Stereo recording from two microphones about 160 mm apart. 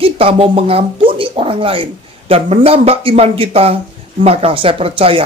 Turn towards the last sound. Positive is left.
turn(degrees=-35)  # may be behind; listen again after turning